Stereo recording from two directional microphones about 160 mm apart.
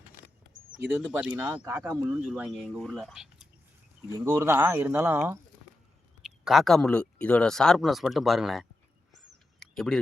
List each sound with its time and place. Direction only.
0.9 s speech: 10° right (ahead or behind)
1.6 s speech: 20° right (ahead or behind)
2.0 s speech: 5° right (ahead or behind)
4.3 s speech: 15° right (ahead or behind)
6.4 s speech: centre (ahead or behind)
9.6 s a sound: centre (ahead or behind)